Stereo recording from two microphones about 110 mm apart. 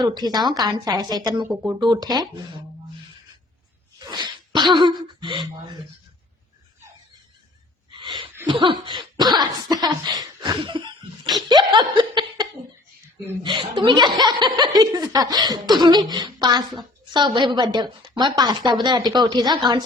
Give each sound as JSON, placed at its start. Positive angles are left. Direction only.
{"t": 0.0, "sound": "a woman's voice", "side_deg": -40}
{"t": 3.9, "sound": "speech", "side_deg": -40}
{"t": 7.9, "sound": "gasp", "side_deg": -45}
{"t": 8.4, "sound": "a woman's voice", "side_deg": -50}